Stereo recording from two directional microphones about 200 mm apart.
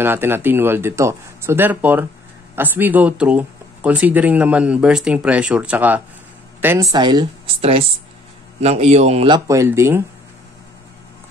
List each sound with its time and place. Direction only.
0.0 s speech: 10° right (ahead or behind); by 9.4 s 30° right (ahead or behind)
9.5 s speech: 15° right (ahead or behind)